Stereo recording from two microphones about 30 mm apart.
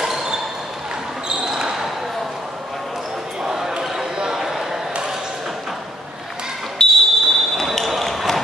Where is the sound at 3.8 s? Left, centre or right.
Centre.